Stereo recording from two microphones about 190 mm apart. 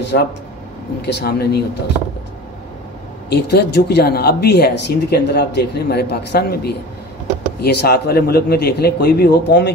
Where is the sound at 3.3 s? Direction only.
60° left (ahead or behind).